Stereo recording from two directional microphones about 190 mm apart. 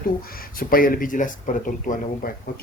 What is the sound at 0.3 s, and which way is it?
Speech, 50° left (ahead or behind).